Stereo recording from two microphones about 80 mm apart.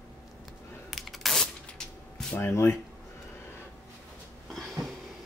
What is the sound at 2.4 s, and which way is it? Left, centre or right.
Speech, left.